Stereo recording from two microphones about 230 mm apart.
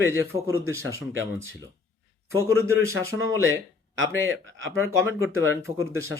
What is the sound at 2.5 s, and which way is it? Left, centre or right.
Speech, centre.